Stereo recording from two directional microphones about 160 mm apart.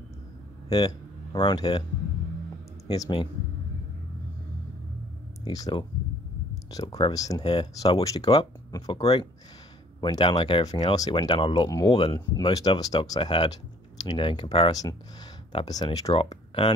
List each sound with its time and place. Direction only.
0.7 s speech: 25° left (ahead or behind)
2.9 s speech: 25° left (ahead or behind)
5.4 s speech: 25° left (ahead or behind)
6.5 s a sound: 20° left (ahead or behind)
7.0 s speech: 25° left (ahead or behind)
11.7 s speech: 20° left (ahead or behind)
14.7 s speech: 20° left (ahead or behind)
16.1 s speech: 35° left (ahead or behind)